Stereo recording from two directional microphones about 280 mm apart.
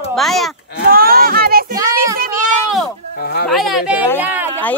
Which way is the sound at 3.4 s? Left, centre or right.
Centre.